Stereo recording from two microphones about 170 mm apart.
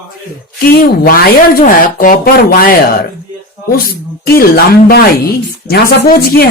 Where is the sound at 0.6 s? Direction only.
65° left (ahead or behind).